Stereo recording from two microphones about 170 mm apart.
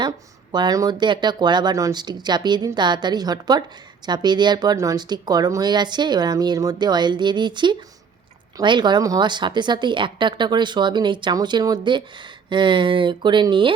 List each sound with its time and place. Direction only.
0.5 s speech: 25° right (ahead or behind)